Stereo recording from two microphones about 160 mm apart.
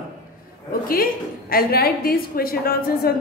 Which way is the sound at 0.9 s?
65° left (ahead or behind).